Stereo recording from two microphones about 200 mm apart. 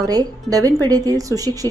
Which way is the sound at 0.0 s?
20° right (ahead or behind).